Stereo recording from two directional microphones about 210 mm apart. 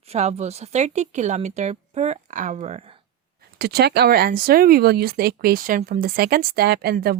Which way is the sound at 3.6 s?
50° right (ahead or behind).